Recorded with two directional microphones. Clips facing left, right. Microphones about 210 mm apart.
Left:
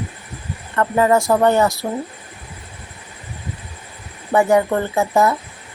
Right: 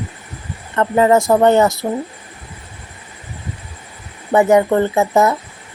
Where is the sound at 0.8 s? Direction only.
20° right (ahead or behind).